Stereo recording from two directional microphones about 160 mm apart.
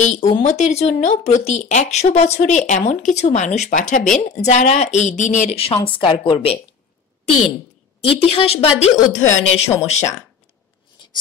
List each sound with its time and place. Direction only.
0.0 s a woman's voice: 45° left (ahead or behind)
8.1 s a woman's voice: 35° left (ahead or behind)